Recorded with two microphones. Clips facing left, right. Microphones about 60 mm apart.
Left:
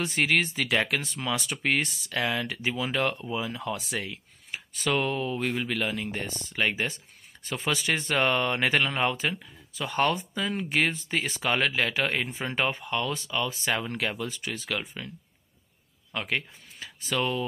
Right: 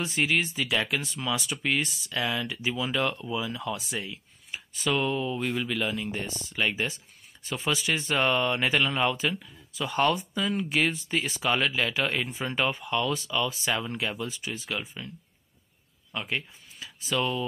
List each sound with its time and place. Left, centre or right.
0.0 s speech: left
16.1 s speech: left